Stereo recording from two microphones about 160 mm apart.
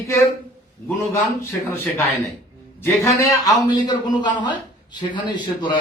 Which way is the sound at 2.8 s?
15° left (ahead or behind).